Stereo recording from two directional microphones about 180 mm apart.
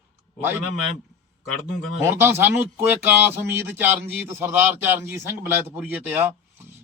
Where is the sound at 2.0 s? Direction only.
15° right (ahead or behind).